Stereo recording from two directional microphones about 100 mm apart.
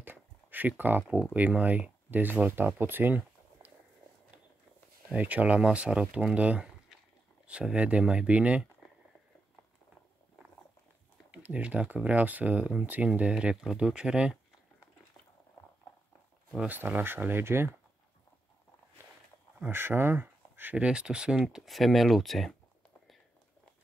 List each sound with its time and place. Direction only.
0.0 s a sound: 20° right (ahead or behind)
1.3 s speech: 15° right (ahead or behind)
5.1 s speech: 15° right (ahead or behind)
11.3 s speech: 10° right (ahead or behind)
16.6 s speech: 20° right (ahead or behind)
19.6 s speech: 20° right (ahead or behind); by 22.6 s centre (ahead or behind)